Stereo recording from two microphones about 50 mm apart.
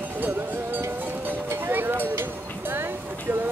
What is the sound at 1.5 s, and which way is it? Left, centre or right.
Music, right.